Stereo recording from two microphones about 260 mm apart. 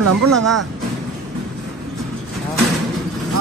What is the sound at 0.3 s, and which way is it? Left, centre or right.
Speech, centre.